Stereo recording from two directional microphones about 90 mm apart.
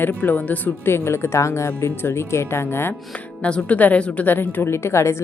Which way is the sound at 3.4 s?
15° left (ahead or behind).